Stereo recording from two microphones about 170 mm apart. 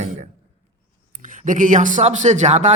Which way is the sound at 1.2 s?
50° right (ahead or behind).